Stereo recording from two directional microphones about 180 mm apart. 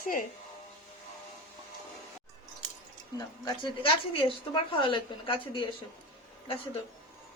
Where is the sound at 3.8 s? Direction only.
30° left (ahead or behind).